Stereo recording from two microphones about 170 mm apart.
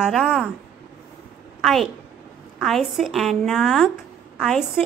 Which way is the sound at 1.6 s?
Centre (ahead or behind).